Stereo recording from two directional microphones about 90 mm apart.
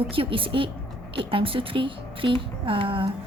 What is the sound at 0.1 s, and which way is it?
A woman's voice, 80° right.